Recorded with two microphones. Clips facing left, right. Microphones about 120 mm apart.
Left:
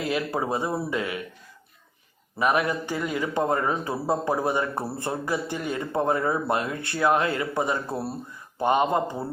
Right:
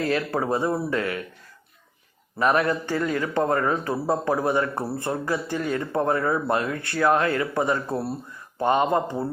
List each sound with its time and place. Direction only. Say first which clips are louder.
0.0 s a man's voice: right 2 dB; 15° left (ahead or behind)
2.4 s a man's voice: right 2 dB; 10° left (ahead or behind)
7.9 s a man's voice: right 3 dB; 10° left (ahead or behind)